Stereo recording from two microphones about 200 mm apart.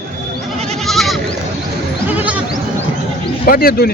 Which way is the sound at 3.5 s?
50° left (ahead or behind).